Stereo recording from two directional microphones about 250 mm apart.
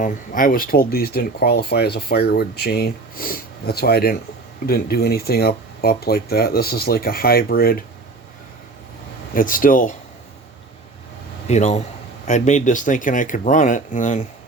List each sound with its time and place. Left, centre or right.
0.0 s speech: left
9.3 s speech: left
11.4 s speech: left